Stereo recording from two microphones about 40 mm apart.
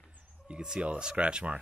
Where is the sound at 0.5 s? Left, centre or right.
Centre.